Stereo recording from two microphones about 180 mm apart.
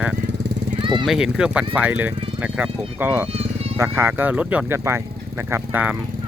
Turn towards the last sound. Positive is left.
turn(degrees=-10)  # may be behind; listen again after turning